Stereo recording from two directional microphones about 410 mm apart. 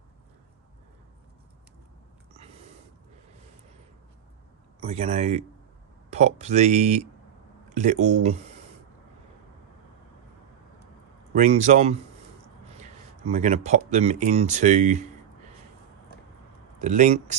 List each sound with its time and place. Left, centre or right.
2.3 s a sound: centre
4.8 s speech: centre
11.3 s speech: centre
13.2 s speech: centre
16.8 s speech: centre